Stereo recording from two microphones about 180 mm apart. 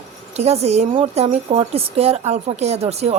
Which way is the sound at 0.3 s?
35° right (ahead or behind).